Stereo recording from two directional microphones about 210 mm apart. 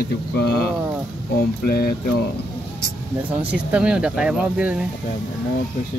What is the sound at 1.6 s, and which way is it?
Speech, 45° left (ahead or behind).